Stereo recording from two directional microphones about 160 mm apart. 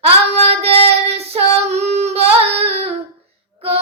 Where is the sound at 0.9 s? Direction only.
40° right (ahead or behind).